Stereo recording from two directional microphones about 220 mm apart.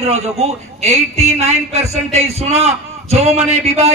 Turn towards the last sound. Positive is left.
turn(degrees=-30)  # may be behind; listen again after turning